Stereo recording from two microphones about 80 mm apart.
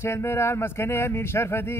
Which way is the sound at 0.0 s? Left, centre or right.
Left.